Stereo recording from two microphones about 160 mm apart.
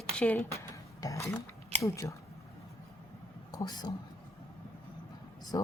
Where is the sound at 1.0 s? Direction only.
20° left (ahead or behind).